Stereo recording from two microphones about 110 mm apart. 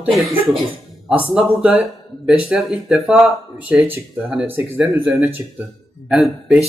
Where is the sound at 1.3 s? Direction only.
5° right (ahead or behind).